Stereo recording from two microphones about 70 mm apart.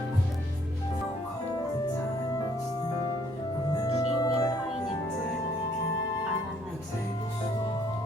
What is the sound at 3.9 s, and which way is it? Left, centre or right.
Music, left.